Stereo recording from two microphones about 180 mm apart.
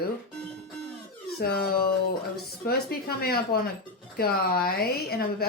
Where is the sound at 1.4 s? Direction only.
60° left (ahead or behind).